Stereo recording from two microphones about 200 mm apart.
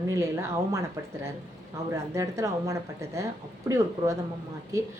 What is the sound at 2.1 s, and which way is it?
Speech, 15° right (ahead or behind).